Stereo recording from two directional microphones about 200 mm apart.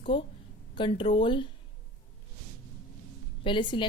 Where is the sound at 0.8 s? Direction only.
25° left (ahead or behind).